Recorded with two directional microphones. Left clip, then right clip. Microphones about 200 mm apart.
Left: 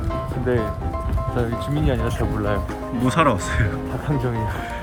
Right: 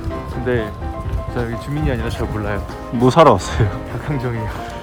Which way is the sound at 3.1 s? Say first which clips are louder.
Right 8 dB; 20° right (ahead or behind).